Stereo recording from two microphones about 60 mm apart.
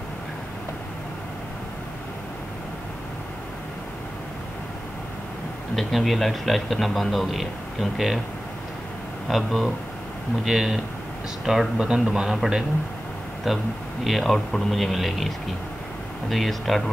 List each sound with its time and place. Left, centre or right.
5.8 s a man's voice: centre
9.3 s a man's voice: centre